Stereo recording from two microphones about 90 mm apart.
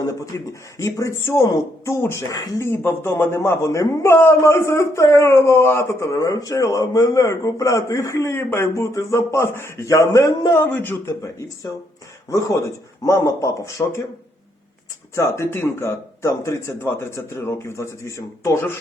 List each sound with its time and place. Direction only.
0.0 s a man's voice: 35° left (ahead or behind)
2.6 s a man's voice: 25° left (ahead or behind)
8.7 s a man's voice: 35° left (ahead or behind)
11.2 s a man's voice: 35° left (ahead or behind)
15.1 s speech: 30° left (ahead or behind)